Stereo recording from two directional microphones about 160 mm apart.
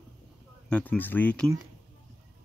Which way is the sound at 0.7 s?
10° left (ahead or behind).